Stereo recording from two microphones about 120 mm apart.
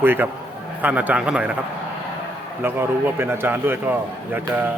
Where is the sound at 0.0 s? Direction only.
15° right (ahead or behind).